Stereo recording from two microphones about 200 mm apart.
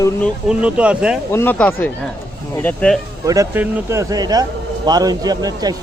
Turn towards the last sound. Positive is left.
turn(degrees=-20)  # may be behind; listen again after turning